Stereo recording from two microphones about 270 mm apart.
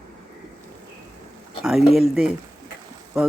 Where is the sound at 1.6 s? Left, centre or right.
Centre.